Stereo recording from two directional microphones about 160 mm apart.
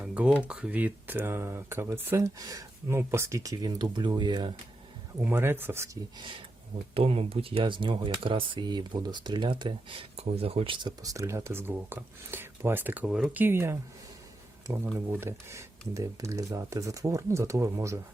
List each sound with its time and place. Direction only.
0.0 s a sound: 10° right (ahead or behind)
0.4 s speech: 5° right (ahead or behind); by 4.5 s 25° right (ahead or behind)
5.2 s speech: 15° right (ahead or behind)
6.1 s speech: 30° right (ahead or behind); by 13.7 s 15° right (ahead or behind)
14.9 s speech: 15° right (ahead or behind)